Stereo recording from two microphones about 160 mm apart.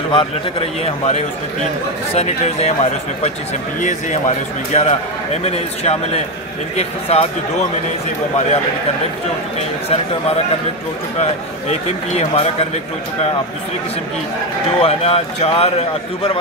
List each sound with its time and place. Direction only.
0.1 s a man's voice: 35° left (ahead or behind)
4.7 s a man's voice: 45° left (ahead or behind)
11.7 s speech: 45° left (ahead or behind)
14.8 s a man's voice: 40° left (ahead or behind)